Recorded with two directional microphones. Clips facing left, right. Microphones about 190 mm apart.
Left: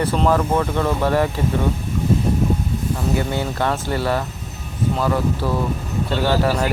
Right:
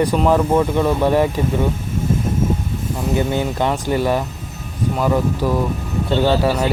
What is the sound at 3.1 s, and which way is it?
Speech, 15° right (ahead or behind).